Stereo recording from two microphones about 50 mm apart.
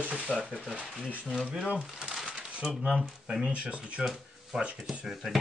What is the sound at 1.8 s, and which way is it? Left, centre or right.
Crumpling, centre.